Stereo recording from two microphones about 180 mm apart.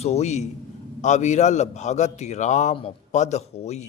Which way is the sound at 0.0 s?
35° left (ahead or behind).